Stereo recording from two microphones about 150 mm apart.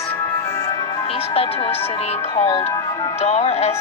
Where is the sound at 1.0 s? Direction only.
40° left (ahead or behind).